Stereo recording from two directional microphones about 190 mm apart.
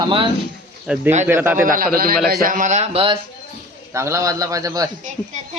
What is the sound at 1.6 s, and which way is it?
A man's voice, 45° right (ahead or behind).